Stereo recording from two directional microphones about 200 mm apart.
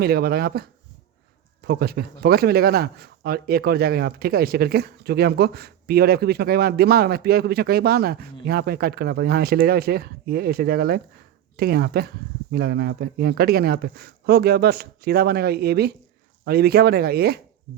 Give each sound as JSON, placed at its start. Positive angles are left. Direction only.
{"t": 0.0, "sound": "speech", "side_deg": -50}